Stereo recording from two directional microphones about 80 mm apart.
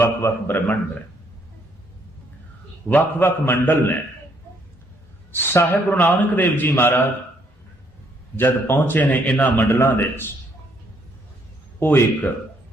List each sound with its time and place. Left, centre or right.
0.0 s a man's voice: left
2.9 s a man's voice: left
5.3 s a man's voice: left
8.4 s a man's voice: left
9.6 s a man's voice: left
11.8 s a man's voice: left